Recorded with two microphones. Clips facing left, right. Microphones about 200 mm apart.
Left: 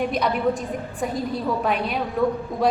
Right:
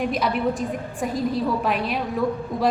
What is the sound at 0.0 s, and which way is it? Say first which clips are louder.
A woman's voice: left 1 dB; centre (ahead or behind).